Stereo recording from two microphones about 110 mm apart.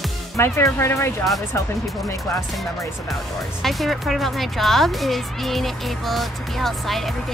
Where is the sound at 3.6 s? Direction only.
Centre (ahead or behind).